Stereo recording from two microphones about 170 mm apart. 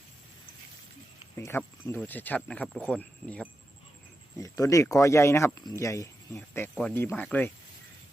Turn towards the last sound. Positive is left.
turn(degrees=10)  # may be behind; listen again after turning